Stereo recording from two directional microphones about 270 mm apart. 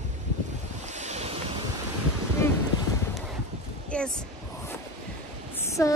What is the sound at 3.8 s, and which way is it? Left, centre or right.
Speech, centre.